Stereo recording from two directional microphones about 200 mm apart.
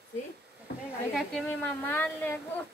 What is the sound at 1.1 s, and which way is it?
A woman's voice, 5° left (ahead or behind).